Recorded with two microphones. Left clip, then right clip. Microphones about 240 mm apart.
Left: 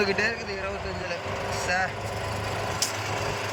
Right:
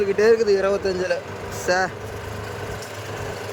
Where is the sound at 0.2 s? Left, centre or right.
Right.